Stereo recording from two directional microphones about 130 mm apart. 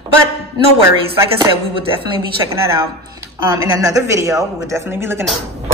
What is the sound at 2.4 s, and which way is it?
A woman's voice, 25° right (ahead or behind).